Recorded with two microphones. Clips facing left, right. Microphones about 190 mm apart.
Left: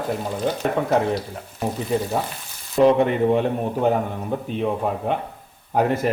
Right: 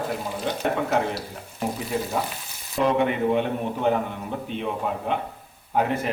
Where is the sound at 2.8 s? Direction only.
35° left (ahead or behind).